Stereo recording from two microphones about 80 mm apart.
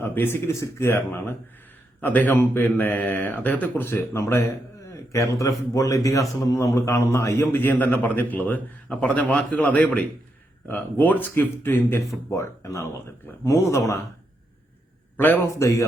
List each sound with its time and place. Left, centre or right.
0.0 s a man's voice: left
12.3 s speech: left
15.2 s a man's voice: left
15.5 s speech: left